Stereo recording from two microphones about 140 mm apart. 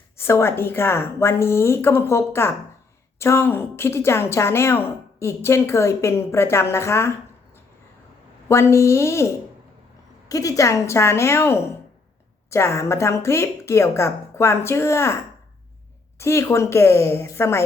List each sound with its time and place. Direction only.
0.2 s a woman's voice: 15° left (ahead or behind)
8.4 s a woman's voice: 20° left (ahead or behind)